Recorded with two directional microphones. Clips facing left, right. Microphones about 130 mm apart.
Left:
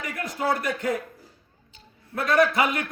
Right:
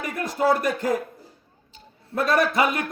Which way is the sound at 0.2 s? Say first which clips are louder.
Right 5 dB; 40° right (ahead or behind).